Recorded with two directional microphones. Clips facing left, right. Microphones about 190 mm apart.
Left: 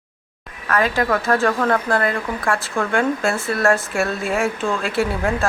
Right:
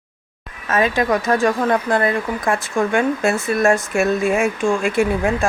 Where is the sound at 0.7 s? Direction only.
20° right (ahead or behind).